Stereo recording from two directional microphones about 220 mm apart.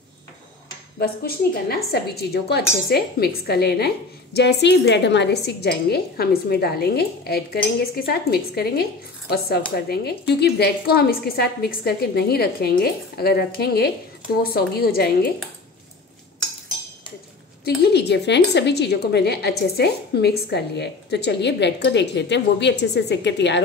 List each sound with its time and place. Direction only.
0.9 s speech: 45° left (ahead or behind)
9.8 s speech: 45° left (ahead or behind)
17.6 s speech: 50° left (ahead or behind)